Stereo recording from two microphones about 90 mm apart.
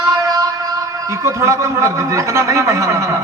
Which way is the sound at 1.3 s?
35° right (ahead or behind).